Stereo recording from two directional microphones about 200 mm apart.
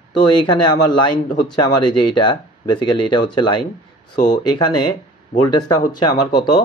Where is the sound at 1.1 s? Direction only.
20° left (ahead or behind).